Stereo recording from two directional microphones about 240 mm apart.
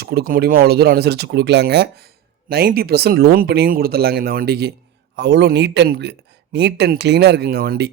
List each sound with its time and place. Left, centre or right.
0.0 s speech: right